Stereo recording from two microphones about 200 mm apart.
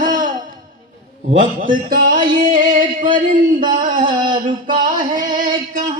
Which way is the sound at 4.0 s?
25° right (ahead or behind).